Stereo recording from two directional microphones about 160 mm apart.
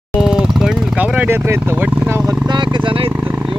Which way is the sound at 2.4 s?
30° right (ahead or behind).